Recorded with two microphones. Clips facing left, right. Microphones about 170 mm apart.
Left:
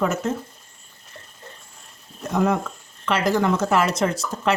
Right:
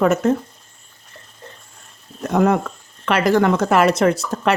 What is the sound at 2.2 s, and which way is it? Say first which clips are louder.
Speech: right 5 dB; 60° right (ahead or behind).